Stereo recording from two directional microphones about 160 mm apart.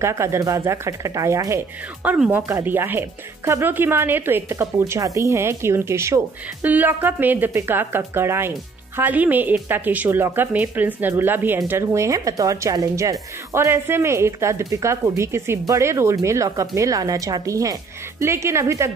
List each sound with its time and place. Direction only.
0.0 s speech: 15° right (ahead or behind)
2.0 s speech: 10° right (ahead or behind)